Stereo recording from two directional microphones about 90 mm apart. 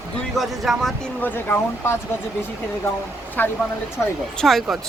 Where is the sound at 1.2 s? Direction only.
20° left (ahead or behind).